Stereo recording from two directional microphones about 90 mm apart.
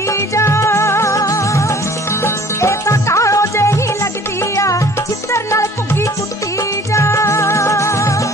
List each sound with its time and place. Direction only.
0.1 s music: 30° left (ahead or behind)